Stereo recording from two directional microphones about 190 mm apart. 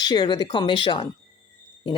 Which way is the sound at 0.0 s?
20° left (ahead or behind).